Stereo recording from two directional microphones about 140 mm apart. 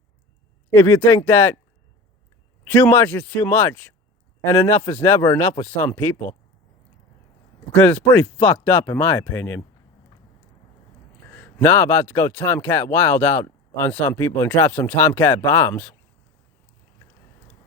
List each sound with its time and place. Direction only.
0.7 s speech: 15° left (ahead or behind)
2.6 s speech: 15° left (ahead or behind)
7.7 s speech: 10° left (ahead or behind)
11.3 s speech: 15° left (ahead or behind)